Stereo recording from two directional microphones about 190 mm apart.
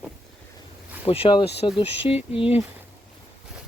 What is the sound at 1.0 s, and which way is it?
Speech, 30° left (ahead or behind).